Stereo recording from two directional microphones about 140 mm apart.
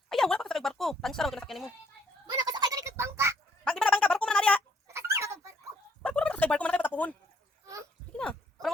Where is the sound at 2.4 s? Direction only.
30° right (ahead or behind).